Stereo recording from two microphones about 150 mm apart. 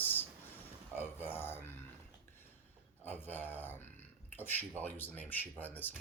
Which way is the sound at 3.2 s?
15° left (ahead or behind).